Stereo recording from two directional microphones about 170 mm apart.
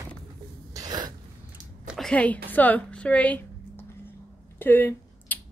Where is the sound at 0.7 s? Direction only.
25° right (ahead or behind).